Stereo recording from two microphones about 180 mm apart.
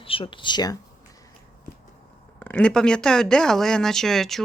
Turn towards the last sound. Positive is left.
turn(degrees=0)  # may be behind; listen again after turning